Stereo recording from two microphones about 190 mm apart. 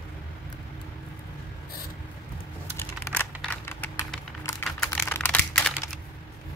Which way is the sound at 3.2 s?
10° left (ahead or behind).